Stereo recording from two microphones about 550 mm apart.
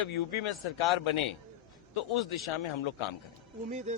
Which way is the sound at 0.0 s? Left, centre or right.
Left.